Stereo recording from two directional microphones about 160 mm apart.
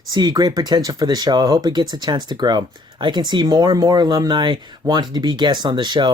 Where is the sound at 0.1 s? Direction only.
25° right (ahead or behind).